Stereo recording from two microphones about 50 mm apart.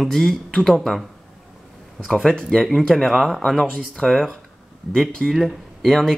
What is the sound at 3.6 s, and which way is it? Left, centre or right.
Speech, left.